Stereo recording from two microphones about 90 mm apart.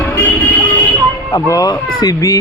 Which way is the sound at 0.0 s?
20° left (ahead or behind).